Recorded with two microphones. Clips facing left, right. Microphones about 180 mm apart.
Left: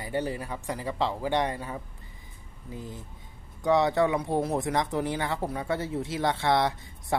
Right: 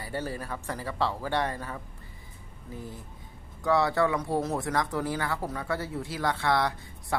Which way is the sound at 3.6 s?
20° left (ahead or behind).